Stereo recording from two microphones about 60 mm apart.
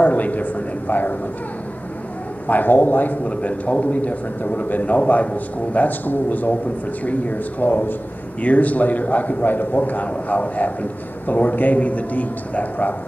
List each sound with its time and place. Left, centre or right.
0.0 s a man's voice: left
2.4 s a man's voice: left